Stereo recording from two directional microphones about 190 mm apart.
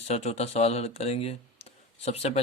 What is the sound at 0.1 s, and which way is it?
Speech, 35° left (ahead or behind).